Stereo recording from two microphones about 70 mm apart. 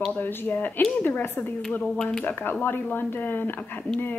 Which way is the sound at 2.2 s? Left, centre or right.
Left.